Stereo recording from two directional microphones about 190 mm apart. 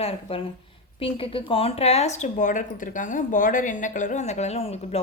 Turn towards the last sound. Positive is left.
turn(degrees=30)  # may be behind; listen again after turning